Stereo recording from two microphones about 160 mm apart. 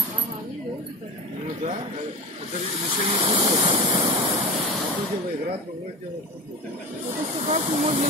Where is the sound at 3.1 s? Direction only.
35° right (ahead or behind).